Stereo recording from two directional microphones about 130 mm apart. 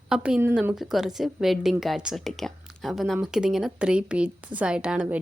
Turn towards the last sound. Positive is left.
turn(degrees=-5)  # may be behind; listen again after turning